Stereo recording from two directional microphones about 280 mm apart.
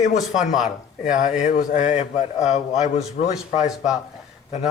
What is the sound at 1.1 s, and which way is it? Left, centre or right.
A man's voice, left.